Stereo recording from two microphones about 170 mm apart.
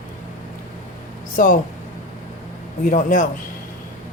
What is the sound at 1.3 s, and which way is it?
Speech, 55° left (ahead or behind).